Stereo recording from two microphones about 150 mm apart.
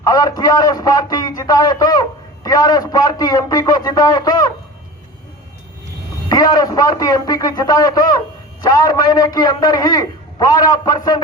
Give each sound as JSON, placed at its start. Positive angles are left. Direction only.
{"t": 0.0, "sound": "a man's voice", "side_deg": 25}
{"t": 6.2, "sound": "a man's voice", "side_deg": 25}